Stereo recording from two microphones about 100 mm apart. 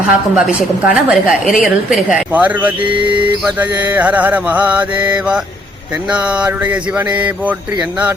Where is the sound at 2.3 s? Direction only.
15° right (ahead or behind).